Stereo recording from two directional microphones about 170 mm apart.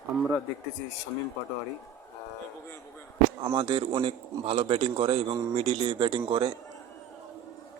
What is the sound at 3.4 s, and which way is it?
A man's voice, 30° right (ahead or behind).